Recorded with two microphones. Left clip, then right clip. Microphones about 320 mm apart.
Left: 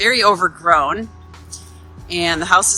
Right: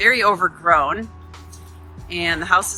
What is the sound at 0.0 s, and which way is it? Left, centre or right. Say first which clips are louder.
Speech: left 2 dB; centre.